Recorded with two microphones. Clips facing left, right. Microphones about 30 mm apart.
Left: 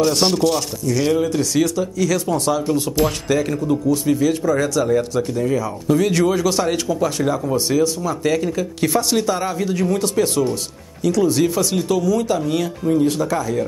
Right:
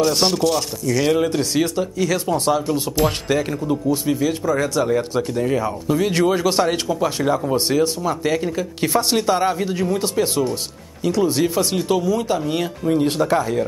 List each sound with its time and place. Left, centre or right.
0.0 s speech: centre
1.1 s speech: right
6.0 s speech: right
7.7 s speech: right
8.2 s speech: centre
11.9 s speech: right
12.9 s speech: right